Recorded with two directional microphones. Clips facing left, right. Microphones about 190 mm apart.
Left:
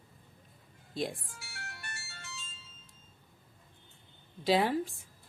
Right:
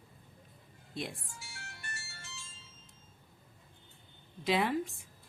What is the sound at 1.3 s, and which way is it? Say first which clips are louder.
Music: left 2 dB; 65° left (ahead or behind).